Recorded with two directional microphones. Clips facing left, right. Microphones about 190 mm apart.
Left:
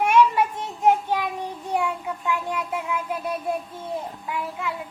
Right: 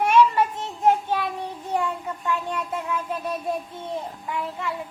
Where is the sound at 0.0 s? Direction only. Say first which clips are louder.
Even; 10° left (ahead or behind).